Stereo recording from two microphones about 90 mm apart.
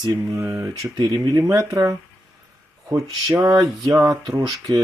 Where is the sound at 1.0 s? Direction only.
55° right (ahead or behind).